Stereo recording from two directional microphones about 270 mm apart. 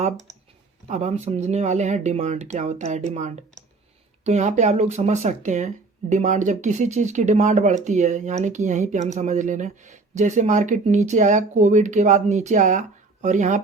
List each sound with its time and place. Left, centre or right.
0.9 s speech: right